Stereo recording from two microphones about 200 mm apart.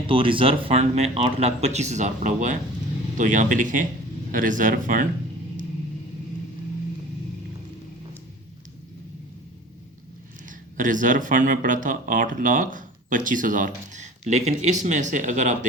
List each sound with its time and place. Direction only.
0.1 s speech: 25° right (ahead or behind); by 5.0 s 40° right (ahead or behind)
10.8 s speech: 40° right (ahead or behind)